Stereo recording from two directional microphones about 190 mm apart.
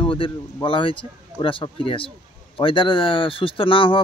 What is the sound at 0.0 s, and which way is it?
A man's voice, 25° left (ahead or behind).